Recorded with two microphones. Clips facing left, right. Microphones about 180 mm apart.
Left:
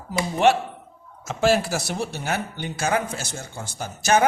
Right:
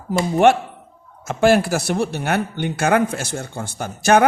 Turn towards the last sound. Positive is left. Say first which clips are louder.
# right 5 dB
turn(degrees=-60)  # may be behind; listen again after turning